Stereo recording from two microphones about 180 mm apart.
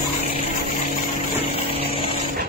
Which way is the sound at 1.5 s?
30° left (ahead or behind).